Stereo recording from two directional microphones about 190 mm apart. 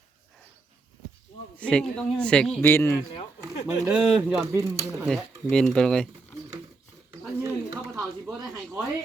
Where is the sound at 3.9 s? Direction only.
5° right (ahead or behind).